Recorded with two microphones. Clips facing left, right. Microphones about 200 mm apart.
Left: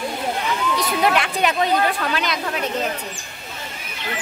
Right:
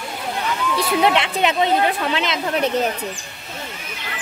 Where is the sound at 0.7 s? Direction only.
25° right (ahead or behind).